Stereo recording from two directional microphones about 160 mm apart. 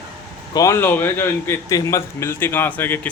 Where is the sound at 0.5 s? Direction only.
20° left (ahead or behind).